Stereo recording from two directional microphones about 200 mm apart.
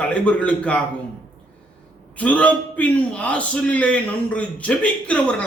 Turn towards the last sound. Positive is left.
turn(degrees=5)  # may be behind; listen again after turning